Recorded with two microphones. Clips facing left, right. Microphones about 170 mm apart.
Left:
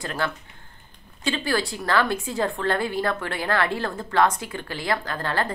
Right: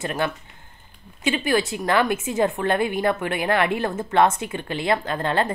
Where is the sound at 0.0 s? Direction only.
20° right (ahead or behind).